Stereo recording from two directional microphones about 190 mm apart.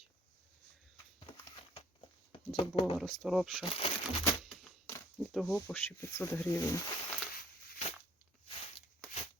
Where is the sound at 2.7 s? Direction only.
25° left (ahead or behind).